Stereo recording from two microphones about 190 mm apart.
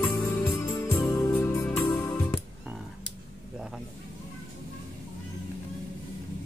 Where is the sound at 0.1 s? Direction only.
15° left (ahead or behind).